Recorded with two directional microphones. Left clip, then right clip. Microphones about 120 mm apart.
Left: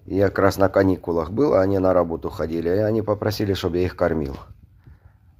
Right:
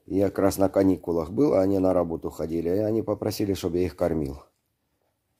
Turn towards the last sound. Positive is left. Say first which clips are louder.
# left 4 dB
turn(degrees=-30)  # may be behind; listen again after turning